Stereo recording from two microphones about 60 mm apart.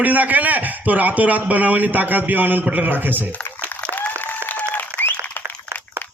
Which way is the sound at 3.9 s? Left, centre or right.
Left.